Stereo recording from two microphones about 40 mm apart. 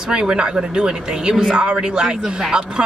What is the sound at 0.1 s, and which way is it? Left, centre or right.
Speech, right.